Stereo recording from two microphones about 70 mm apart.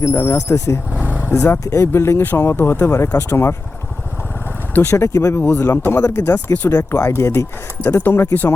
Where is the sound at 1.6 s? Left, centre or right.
Left.